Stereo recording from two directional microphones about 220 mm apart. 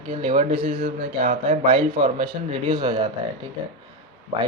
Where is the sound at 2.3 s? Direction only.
20° right (ahead or behind).